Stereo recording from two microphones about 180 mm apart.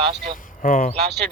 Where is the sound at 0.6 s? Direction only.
50° left (ahead or behind).